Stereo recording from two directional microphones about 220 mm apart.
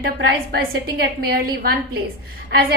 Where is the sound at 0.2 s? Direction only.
55° right (ahead or behind).